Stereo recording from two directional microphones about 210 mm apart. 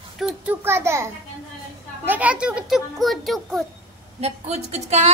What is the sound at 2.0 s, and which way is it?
A child's voice, 10° right (ahead or behind).